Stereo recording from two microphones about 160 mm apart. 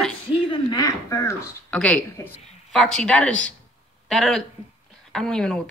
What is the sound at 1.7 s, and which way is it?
Speech, 10° left (ahead or behind).